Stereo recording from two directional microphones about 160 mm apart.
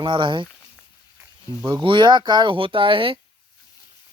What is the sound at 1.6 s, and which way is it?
Speech, 30° right (ahead or behind).